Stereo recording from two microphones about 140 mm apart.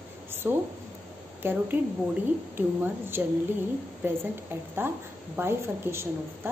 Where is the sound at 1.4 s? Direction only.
15° right (ahead or behind).